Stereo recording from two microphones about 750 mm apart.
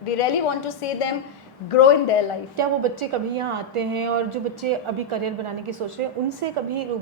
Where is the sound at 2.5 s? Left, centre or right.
Right.